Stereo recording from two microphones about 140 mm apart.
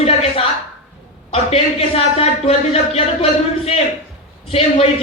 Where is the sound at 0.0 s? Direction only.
45° left (ahead or behind).